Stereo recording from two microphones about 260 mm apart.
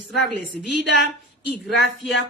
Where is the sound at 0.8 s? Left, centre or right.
Left.